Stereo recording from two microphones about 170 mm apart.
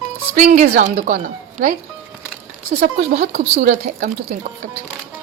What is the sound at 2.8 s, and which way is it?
A woman's voice, 60° right (ahead or behind).